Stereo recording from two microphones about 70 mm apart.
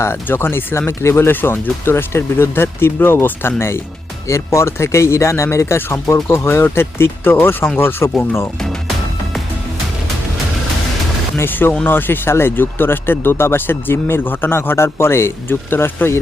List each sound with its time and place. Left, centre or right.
0.0 s speech: left
11.3 s speech: left